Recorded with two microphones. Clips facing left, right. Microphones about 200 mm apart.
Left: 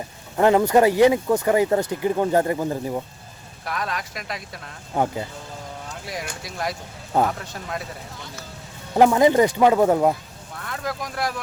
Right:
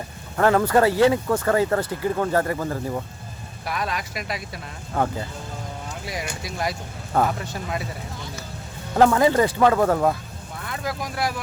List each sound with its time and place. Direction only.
0.3 s speech: 20° left (ahead or behind)
3.7 s speech: 5° right (ahead or behind)
4.9 s speech: 20° left (ahead or behind)
6.1 s speech: centre (ahead or behind)
9.0 s speech: 15° left (ahead or behind)
10.6 s speech: 5° right (ahead or behind)